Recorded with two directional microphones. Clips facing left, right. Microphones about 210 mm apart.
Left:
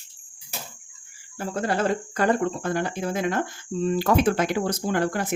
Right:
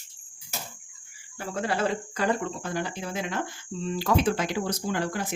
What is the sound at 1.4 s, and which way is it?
Speech, 45° left (ahead or behind).